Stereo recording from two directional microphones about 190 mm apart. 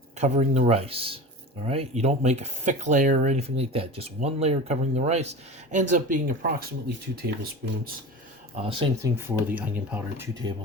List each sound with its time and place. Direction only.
0.2 s speech: 35° right (ahead or behind); by 7.9 s 55° right (ahead or behind)
8.6 s speech: 25° right (ahead or behind)
9.0 s speech: 15° right (ahead or behind)